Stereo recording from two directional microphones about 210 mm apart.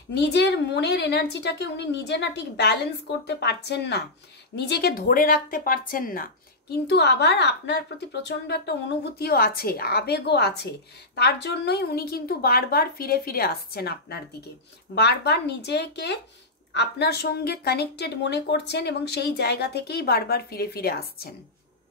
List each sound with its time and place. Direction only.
0.1 s a woman's voice: 55° left (ahead or behind)